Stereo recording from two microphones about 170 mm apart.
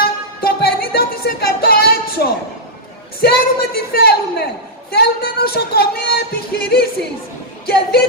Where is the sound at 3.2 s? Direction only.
70° left (ahead or behind).